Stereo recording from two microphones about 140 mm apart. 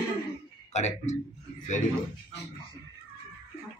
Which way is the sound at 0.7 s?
55° left (ahead or behind).